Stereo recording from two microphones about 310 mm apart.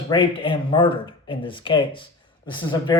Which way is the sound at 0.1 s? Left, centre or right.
Centre.